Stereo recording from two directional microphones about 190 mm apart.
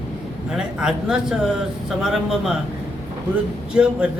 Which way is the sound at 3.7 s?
5° right (ahead or behind).